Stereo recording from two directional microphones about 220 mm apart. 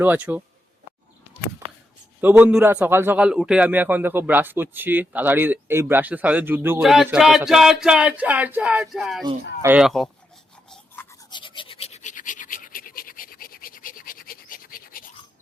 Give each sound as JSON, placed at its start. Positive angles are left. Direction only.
{"t": 0.0, "sound": "a man's voice", "side_deg": -10}
{"t": 2.2, "sound": "a man's voice", "side_deg": -10}
{"t": 10.7, "sound": "toothbrush", "side_deg": 10}
{"t": 11.3, "sound": "a sound", "side_deg": 20}